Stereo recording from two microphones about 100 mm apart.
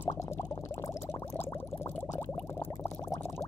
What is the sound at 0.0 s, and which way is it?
Boiling, 30° left (ahead or behind).